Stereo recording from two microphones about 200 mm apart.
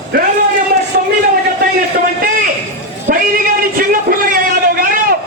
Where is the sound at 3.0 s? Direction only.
45° right (ahead or behind).